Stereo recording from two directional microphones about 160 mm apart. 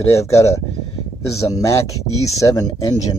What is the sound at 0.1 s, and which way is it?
Speech, 15° left (ahead or behind).